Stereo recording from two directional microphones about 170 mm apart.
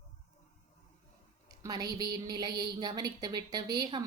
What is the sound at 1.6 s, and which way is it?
Speech, 20° right (ahead or behind).